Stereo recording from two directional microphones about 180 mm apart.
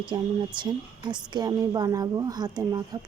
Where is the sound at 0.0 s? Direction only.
25° right (ahead or behind).